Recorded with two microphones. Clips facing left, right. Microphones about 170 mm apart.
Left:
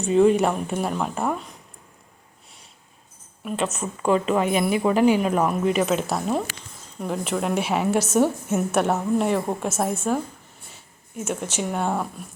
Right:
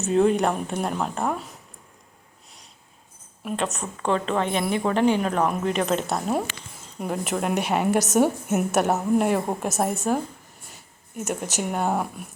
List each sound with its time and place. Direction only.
0.0 s a woman's voice: centre (ahead or behind)
3.4 s a woman's voice: centre (ahead or behind)
11.5 s speech: 5° right (ahead or behind)